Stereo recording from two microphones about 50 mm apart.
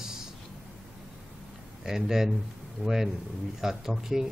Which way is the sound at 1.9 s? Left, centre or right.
Centre.